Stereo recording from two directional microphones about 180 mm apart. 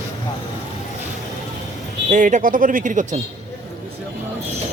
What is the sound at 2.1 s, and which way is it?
Speech, 45° right (ahead or behind).